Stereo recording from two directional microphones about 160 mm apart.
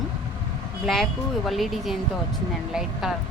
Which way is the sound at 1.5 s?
Centre (ahead or behind).